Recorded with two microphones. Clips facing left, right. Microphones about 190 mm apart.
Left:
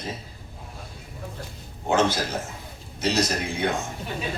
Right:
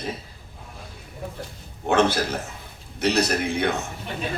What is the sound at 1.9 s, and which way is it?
A man's voice, 65° right (ahead or behind).